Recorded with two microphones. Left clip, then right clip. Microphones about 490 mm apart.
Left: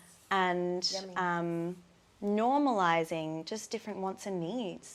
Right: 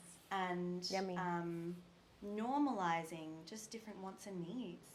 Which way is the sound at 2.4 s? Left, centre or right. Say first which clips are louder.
Left 10 dB; left.